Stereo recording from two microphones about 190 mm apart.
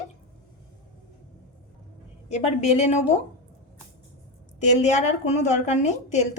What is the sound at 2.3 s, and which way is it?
Speech, 35° left (ahead or behind).